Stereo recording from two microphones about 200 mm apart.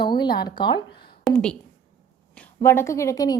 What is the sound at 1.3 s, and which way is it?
Speech, 5° left (ahead or behind).